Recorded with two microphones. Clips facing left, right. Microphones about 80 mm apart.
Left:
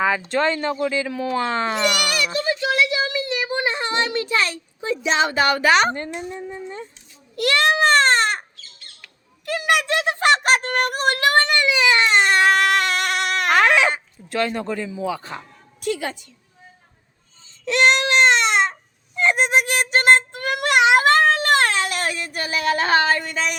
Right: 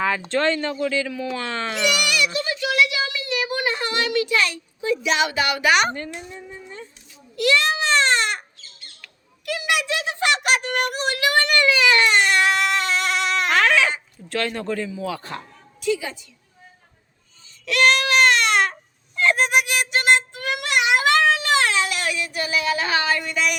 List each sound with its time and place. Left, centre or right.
0.0 s speech: centre
1.1 s speech: left
1.4 s speech: left
1.8 s a sound: left
6.3 s speech: left
7.3 s a sound: left
9.5 s a child's voice: left
11.4 s speech: left
12.5 s music: left
13.5 s speech: centre
15.8 s a woman's voice: left
17.7 s baby cry: left
19.6 s a child's voice: left